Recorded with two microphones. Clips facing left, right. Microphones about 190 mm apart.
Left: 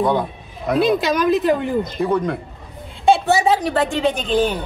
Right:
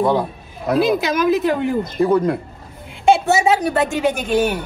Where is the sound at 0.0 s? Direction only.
5° right (ahead or behind).